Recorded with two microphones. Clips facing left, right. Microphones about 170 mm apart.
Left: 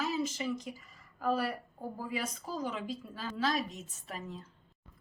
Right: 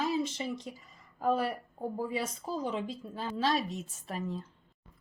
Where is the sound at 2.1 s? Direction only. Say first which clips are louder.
Right 3 dB; 25° right (ahead or behind).